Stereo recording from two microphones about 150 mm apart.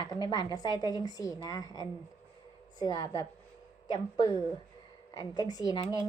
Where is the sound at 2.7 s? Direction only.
25° left (ahead or behind).